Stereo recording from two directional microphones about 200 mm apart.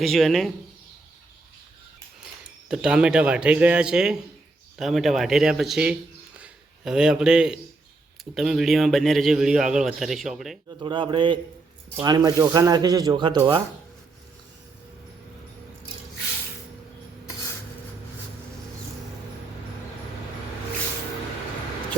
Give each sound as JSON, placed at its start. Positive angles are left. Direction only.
{"t": 0.0, "sound": "speech", "side_deg": 0}
{"t": 2.6, "sound": "a man's voice", "side_deg": -5}
{"t": 10.8, "sound": "speech", "side_deg": -25}